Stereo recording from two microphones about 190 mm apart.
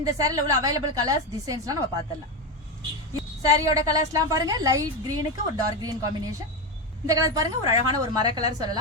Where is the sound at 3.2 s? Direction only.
15° right (ahead or behind).